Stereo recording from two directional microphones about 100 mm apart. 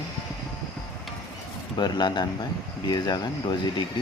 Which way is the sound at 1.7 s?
45° left (ahead or behind).